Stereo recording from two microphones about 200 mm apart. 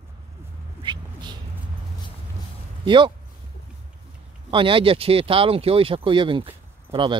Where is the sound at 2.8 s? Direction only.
25° right (ahead or behind).